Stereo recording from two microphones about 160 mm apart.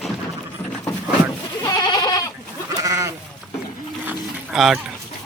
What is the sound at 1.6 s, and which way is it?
Goat, 25° left (ahead or behind).